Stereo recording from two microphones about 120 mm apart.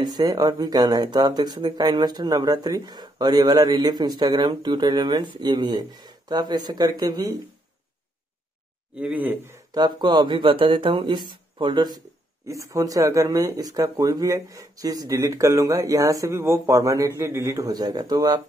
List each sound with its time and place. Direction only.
0.0 s speech: 35° right (ahead or behind)
8.9 s speech: 15° right (ahead or behind)
9.7 s speech: 35° right (ahead or behind)
12.4 s speech: 25° right (ahead or behind)